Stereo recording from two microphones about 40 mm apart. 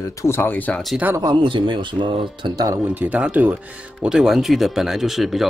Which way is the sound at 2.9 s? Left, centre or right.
Right.